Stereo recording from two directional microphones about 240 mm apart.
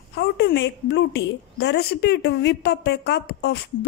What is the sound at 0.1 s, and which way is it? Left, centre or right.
A woman's voice, left.